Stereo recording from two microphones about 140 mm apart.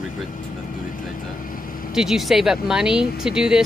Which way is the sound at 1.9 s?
5° right (ahead or behind).